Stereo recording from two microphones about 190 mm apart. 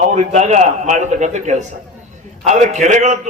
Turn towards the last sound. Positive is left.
turn(degrees=-40)  # may be behind; listen again after turning